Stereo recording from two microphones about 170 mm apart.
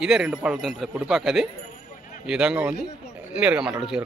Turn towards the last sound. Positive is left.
turn(degrees=-5)  # may be behind; listen again after turning